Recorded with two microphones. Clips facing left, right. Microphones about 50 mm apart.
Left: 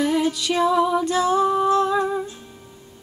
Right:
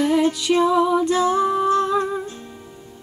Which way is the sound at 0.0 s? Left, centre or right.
Right.